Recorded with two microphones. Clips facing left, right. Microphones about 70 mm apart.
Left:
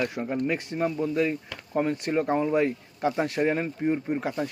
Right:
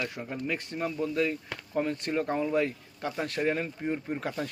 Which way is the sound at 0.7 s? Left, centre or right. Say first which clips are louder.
Left 3 dB; left.